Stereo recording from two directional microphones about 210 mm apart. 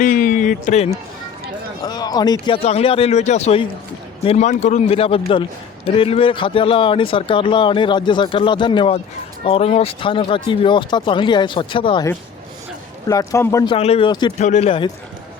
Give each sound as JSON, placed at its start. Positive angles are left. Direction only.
{"t": 0.0, "sound": "speech", "side_deg": 40}
{"t": 1.8, "sound": "a man's voice", "side_deg": 20}
{"t": 13.7, "sound": "a man's voice", "side_deg": 30}
{"t": 14.3, "sound": "speech", "side_deg": 35}